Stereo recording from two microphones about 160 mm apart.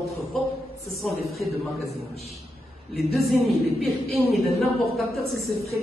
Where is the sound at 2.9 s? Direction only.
Centre (ahead or behind).